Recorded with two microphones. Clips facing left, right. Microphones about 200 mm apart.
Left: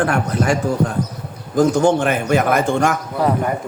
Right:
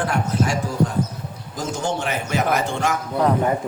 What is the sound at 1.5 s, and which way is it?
A man's voice, 55° left (ahead or behind).